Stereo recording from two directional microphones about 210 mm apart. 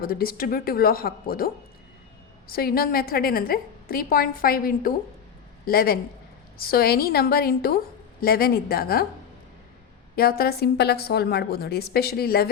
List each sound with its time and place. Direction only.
0.0 s a woman's voice: 45° left (ahead or behind)
2.5 s a woman's voice: 45° left (ahead or behind)
10.2 s a woman's voice: 45° left (ahead or behind)